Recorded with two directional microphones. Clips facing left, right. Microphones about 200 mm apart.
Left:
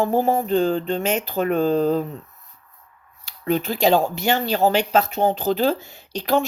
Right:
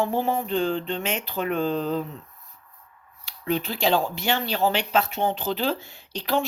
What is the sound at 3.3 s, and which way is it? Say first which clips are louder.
Speech: left 4 dB; 45° left (ahead or behind).